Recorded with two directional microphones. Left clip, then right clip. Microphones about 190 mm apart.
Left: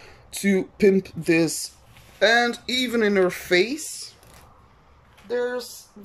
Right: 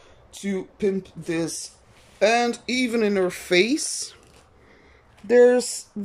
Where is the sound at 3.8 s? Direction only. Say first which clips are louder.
Right 6 dB; 35° right (ahead or behind).